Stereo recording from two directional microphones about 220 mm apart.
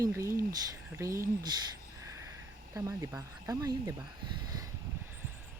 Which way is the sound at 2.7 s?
15° right (ahead or behind).